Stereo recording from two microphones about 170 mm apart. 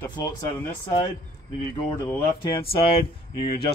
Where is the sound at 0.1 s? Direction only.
20° left (ahead or behind).